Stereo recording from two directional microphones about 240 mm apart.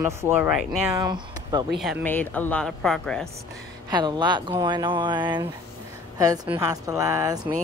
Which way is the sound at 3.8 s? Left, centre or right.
Centre.